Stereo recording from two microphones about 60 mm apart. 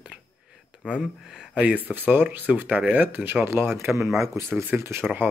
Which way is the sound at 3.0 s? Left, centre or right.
Right.